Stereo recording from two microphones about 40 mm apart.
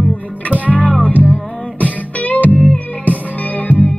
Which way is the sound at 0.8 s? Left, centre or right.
Left.